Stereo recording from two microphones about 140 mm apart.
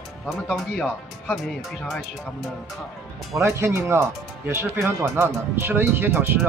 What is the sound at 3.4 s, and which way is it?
Speech, 20° right (ahead or behind).